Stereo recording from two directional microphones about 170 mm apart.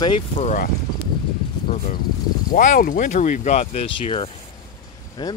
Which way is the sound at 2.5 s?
55° left (ahead or behind).